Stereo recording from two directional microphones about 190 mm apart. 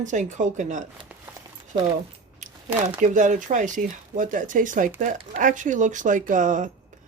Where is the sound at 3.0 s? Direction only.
40° right (ahead or behind).